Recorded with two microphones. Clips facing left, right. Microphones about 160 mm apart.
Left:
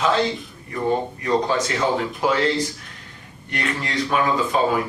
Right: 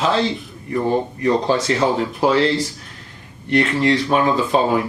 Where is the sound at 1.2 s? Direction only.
35° right (ahead or behind).